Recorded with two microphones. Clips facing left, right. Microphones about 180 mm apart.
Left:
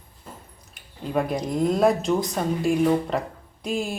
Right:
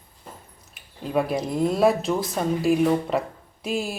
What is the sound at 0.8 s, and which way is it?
A woman's voice, 5° right (ahead or behind).